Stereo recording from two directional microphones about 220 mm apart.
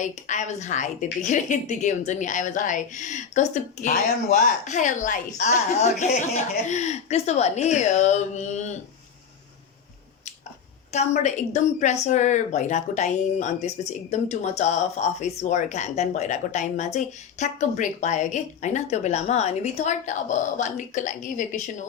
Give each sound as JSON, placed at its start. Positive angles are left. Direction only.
{"t": 0.0, "sound": "a woman's voice", "side_deg": 35}
{"t": 10.9, "sound": "a woman's voice", "side_deg": 30}